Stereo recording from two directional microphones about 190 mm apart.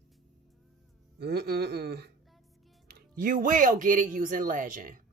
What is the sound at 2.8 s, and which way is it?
A woman's voice, 45° right (ahead or behind).